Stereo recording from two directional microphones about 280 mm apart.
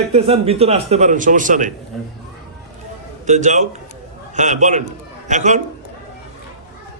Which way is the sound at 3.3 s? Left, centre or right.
Right.